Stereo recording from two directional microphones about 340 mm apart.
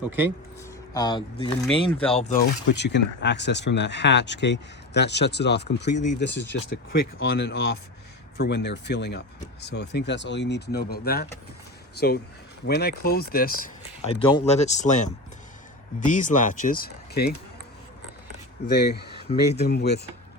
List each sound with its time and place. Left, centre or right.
0.9 s speech: centre
18.7 s speech: left